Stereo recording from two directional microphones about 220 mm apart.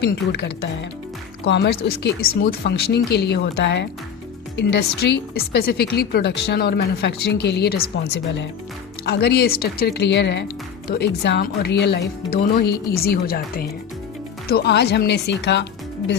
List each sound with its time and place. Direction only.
0.0 s speech: 50° left (ahead or behind)